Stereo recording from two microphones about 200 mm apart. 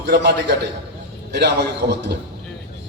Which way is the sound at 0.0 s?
55° right (ahead or behind).